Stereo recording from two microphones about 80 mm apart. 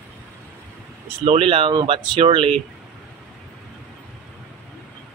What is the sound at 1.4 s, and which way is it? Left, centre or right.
Speech, right.